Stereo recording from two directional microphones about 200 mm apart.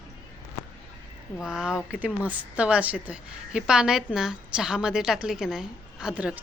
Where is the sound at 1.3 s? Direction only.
5° right (ahead or behind).